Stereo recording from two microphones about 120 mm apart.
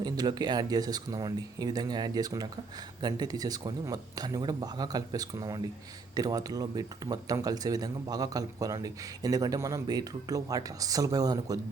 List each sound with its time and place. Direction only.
0.0 s speech: 35° right (ahead or behind)